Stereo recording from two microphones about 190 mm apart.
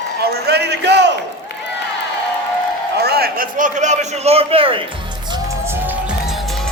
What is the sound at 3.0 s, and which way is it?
A man's voice, 55° right (ahead or behind).